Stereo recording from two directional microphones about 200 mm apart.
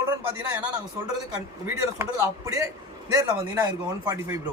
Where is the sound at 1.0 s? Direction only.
15° right (ahead or behind).